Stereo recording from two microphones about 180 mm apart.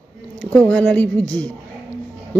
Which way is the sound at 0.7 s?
10° left (ahead or behind).